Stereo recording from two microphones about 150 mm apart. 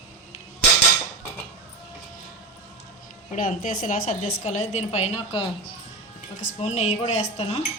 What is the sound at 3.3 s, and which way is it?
A woman's voice, 60° left (ahead or behind).